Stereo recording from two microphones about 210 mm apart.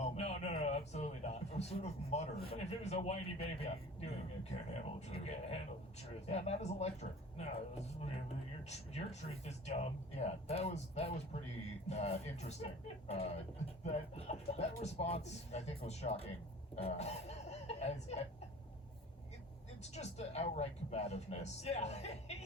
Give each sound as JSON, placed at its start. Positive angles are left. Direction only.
{"t": 0.0, "sound": "a sound", "side_deg": 30}
{"t": 2.5, "sound": "a man's voice", "side_deg": 30}
{"t": 19.8, "sound": "a man's voice", "side_deg": 30}